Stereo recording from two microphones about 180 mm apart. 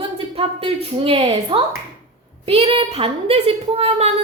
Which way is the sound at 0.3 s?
30° right (ahead or behind).